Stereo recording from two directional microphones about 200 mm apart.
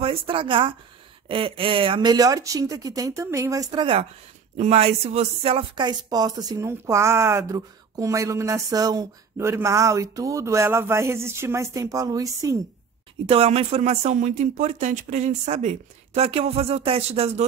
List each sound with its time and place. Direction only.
0.0 s a woman's voice: 25° right (ahead or behind)
3.7 s a woman's voice: 25° right (ahead or behind)
13.3 s speech: 30° right (ahead or behind)